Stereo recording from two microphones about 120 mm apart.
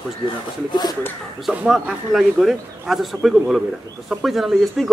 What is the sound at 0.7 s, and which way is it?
Speech, 35° left (ahead or behind).